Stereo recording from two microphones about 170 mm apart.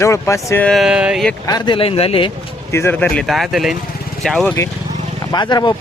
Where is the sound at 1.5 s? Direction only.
25° left (ahead or behind).